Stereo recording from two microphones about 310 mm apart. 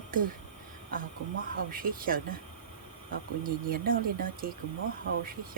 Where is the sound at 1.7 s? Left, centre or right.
Right.